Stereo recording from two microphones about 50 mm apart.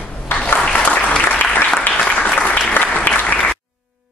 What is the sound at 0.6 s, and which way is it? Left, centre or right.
Applause, left.